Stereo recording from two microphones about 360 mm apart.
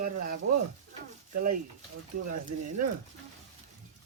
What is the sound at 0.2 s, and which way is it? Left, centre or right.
Speech, right.